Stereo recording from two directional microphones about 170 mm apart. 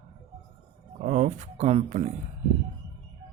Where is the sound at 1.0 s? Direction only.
45° right (ahead or behind).